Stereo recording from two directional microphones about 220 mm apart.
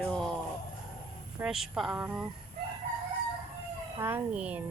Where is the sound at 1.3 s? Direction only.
Centre (ahead or behind).